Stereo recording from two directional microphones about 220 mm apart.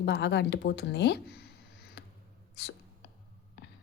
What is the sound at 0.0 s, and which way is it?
A woman's voice, 50° left (ahead or behind).